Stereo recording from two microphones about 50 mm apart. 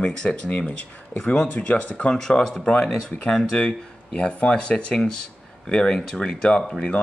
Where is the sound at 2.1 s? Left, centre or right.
Centre.